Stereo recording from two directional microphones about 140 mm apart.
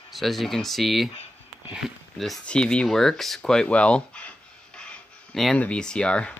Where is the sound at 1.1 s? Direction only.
45° left (ahead or behind).